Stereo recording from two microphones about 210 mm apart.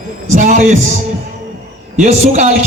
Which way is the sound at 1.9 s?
35° right (ahead or behind).